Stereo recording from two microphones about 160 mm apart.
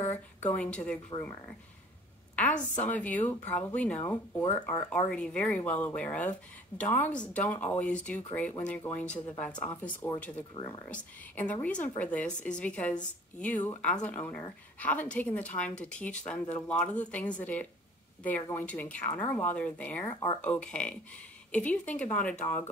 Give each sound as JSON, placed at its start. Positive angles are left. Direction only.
{"t": 0.0, "sound": "a woman's voice", "side_deg": 15}
{"t": 2.3, "sound": "a woman's voice", "side_deg": 10}
{"t": 20.1, "sound": "speech", "side_deg": 25}
{"t": 20.4, "sound": "speech", "side_deg": 5}